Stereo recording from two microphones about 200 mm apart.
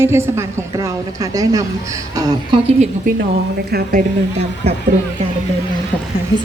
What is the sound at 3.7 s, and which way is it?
Speech, 50° right (ahead or behind).